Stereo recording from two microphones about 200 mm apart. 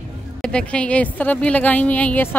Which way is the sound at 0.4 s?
5° left (ahead or behind).